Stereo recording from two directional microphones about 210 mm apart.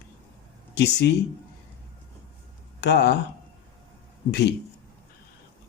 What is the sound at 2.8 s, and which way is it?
Speech, 50° left (ahead or behind).